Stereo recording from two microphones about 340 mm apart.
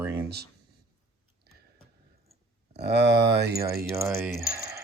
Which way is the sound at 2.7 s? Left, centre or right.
Right.